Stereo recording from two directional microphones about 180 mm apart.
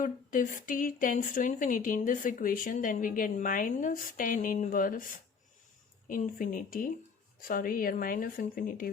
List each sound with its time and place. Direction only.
0.0 s a woman's voice: 45° left (ahead or behind)
6.1 s a woman's voice: 50° left (ahead or behind)